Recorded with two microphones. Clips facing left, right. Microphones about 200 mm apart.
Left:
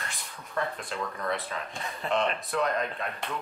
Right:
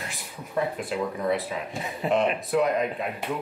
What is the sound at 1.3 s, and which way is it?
A man's voice, 5° right (ahead or behind).